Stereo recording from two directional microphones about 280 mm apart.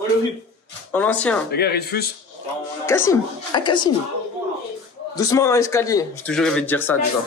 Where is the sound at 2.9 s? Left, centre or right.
Centre.